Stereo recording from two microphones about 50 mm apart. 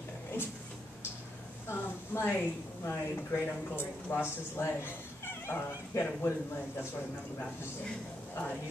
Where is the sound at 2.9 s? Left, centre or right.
Left.